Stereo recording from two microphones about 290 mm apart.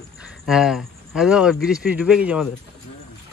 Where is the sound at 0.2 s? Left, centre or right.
Centre.